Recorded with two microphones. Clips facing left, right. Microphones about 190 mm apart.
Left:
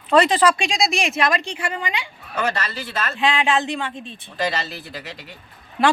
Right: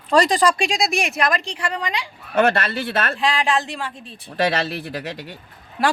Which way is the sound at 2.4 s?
55° right (ahead or behind).